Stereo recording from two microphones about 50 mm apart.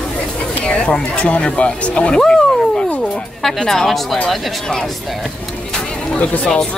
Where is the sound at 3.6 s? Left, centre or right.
Centre.